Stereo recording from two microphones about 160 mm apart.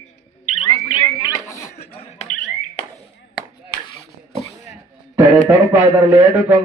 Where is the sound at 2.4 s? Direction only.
35° left (ahead or behind).